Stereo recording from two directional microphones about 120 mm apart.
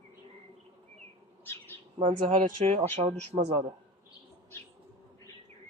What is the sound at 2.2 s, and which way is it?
Speech, 55° right (ahead or behind).